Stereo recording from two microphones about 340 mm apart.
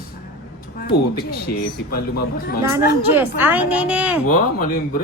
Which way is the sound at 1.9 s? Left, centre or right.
Left.